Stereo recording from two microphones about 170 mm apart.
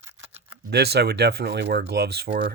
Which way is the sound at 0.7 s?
75° right (ahead or behind).